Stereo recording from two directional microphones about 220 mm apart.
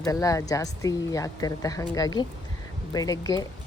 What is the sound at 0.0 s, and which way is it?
Speech, 15° left (ahead or behind).